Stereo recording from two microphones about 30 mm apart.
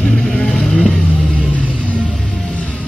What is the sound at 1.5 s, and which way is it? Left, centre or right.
Music, left.